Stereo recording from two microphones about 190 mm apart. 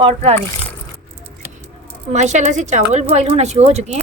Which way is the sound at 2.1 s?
40° right (ahead or behind).